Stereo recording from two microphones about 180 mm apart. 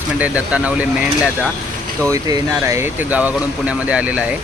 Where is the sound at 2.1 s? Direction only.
15° right (ahead or behind).